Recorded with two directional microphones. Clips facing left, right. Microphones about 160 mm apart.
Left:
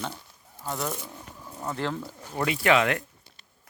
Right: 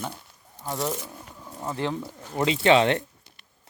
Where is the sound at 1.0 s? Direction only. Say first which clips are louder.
Right 1 dB; 15° right (ahead or behind).